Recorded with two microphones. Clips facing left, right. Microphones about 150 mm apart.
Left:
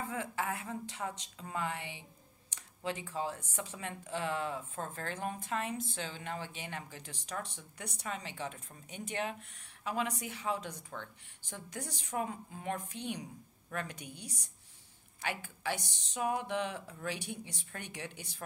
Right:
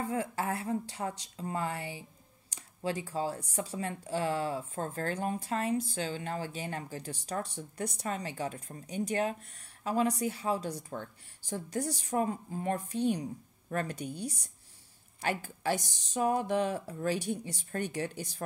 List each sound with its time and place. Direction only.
0.1 s speech: 35° right (ahead or behind)